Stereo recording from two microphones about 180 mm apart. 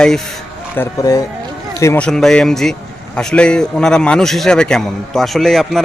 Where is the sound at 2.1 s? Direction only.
5° left (ahead or behind).